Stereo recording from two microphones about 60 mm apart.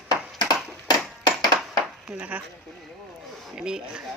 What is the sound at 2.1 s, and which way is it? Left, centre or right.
Speech, right.